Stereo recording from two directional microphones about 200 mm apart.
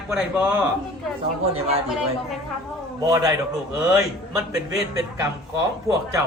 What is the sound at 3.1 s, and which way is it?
A man's voice, 20° right (ahead or behind).